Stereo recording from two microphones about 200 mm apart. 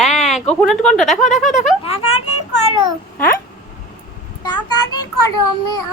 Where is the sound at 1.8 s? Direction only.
30° left (ahead or behind).